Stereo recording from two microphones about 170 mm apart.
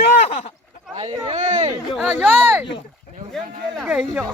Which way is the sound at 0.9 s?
30° right (ahead or behind).